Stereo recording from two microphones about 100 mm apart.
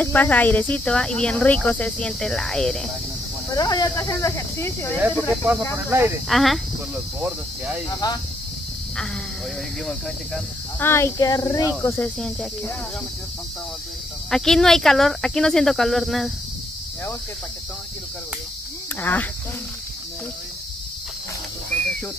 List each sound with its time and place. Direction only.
0.0 s speech: 20° left (ahead or behind)
3.4 s speech: 40° left (ahead or behind)
5.9 s speech: 20° right (ahead or behind)
6.2 s speech: centre (ahead or behind)
7.2 s cricket: 15° right (ahead or behind)
7.9 s speech: 40° left (ahead or behind)
9.8 s speech: 5° left (ahead or behind)
10.8 s speech: 25° left (ahead or behind)
14.3 s speech: 5° left (ahead or behind)
18.9 s speech: 20° left (ahead or behind)